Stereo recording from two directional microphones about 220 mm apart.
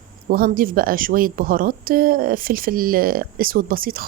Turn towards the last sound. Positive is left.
turn(degrees=-40)  # may be behind; listen again after turning